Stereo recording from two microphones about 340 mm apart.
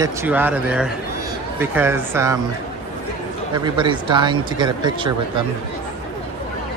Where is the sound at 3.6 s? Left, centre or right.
Centre.